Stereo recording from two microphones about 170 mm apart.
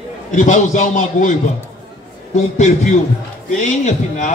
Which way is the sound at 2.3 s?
40° left (ahead or behind).